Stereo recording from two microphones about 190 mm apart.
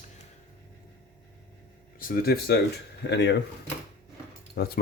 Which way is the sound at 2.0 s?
50° left (ahead or behind).